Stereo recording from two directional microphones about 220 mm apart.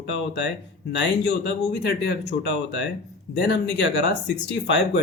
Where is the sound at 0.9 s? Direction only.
50° left (ahead or behind).